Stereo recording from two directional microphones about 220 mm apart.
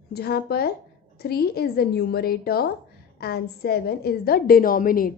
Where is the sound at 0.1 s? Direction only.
45° left (ahead or behind).